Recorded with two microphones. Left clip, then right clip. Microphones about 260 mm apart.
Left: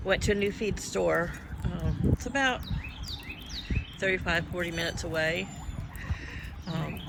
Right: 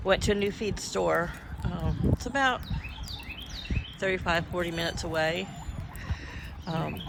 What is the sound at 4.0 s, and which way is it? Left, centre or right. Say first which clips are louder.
Speech: even; centre.